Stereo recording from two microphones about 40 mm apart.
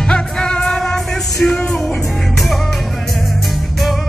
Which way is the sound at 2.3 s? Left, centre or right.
Centre.